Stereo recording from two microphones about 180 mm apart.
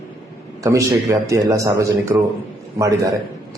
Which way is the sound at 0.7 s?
15° right (ahead or behind).